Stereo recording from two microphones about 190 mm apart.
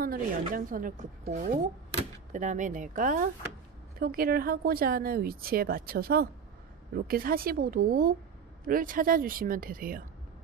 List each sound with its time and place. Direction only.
0.0 s a woman's voice: 50° right (ahead or behind)